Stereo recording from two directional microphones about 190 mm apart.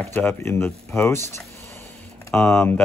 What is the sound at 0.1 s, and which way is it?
Speech, 10° left (ahead or behind).